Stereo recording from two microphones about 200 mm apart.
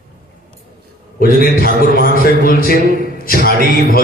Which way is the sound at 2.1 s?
45° left (ahead or behind).